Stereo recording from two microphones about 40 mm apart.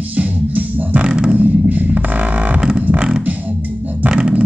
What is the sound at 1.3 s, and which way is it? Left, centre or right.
Music, right.